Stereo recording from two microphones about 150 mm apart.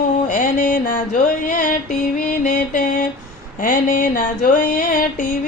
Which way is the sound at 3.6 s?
60° left (ahead or behind).